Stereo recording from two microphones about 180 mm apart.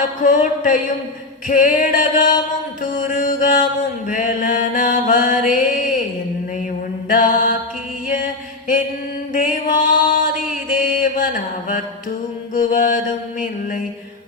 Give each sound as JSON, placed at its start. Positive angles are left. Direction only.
{"t": 0.2, "sound": "music", "side_deg": 45}
{"t": 4.1, "sound": "mantra", "side_deg": 45}
{"t": 7.1, "sound": "mantra", "side_deg": 50}
{"t": 8.0, "sound": "music", "side_deg": 45}
{"t": 9.3, "sound": "mantra", "side_deg": 45}
{"t": 12.5, "sound": "music", "side_deg": 45}